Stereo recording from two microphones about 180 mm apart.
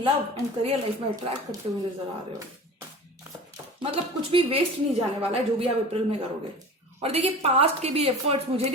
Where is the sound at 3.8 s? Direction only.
30° right (ahead or behind).